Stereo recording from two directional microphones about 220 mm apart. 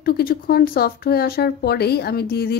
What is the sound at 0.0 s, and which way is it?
Speech, 40° left (ahead or behind).